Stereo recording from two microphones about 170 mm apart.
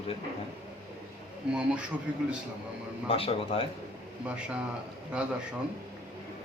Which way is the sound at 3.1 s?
35° left (ahead or behind).